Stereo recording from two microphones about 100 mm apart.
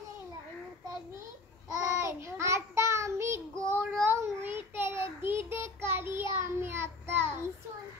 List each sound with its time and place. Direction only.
1.7 s child singing: 30° right (ahead or behind)